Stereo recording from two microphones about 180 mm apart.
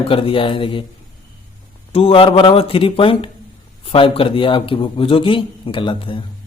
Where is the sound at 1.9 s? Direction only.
30° left (ahead or behind).